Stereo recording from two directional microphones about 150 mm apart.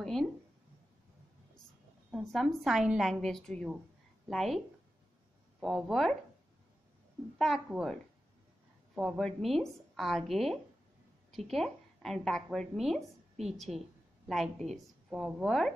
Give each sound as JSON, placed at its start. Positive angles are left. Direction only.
{"t": 0.0, "sound": "a sound", "side_deg": 5}
{"t": 2.0, "sound": "a woman's voice", "side_deg": 0}
{"t": 7.3, "sound": "a woman's voice", "side_deg": 0}